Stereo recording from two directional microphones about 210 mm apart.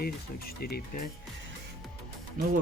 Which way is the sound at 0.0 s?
45° left (ahead or behind).